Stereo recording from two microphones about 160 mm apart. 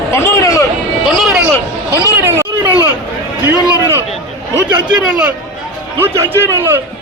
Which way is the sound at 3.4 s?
15° right (ahead or behind).